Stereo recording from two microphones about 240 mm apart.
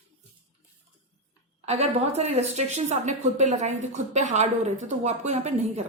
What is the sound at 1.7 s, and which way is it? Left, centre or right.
A woman's voice, right.